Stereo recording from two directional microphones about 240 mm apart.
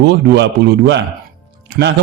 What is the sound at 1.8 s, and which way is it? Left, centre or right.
Speech, right.